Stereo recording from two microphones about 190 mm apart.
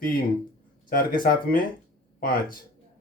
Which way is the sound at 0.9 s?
50° left (ahead or behind).